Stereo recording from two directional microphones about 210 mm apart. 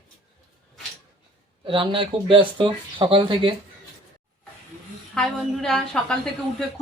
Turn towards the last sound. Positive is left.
turn(degrees=5)  # may be behind; listen again after turning